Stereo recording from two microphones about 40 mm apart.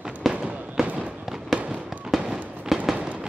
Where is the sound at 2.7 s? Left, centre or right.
Centre.